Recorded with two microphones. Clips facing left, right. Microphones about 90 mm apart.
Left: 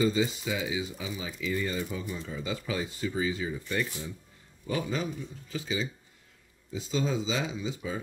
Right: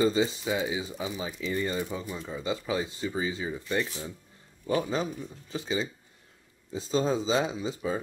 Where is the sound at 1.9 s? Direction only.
20° right (ahead or behind).